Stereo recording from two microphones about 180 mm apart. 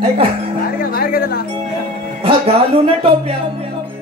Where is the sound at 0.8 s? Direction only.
55° left (ahead or behind).